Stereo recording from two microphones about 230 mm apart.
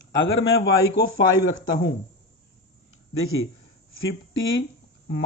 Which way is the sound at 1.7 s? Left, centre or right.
Left.